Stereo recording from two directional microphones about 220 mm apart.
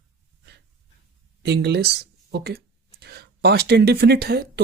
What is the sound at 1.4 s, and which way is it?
Speech, 50° right (ahead or behind).